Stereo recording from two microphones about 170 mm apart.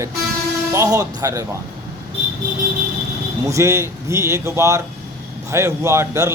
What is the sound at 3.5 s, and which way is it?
Speech, 15° right (ahead or behind).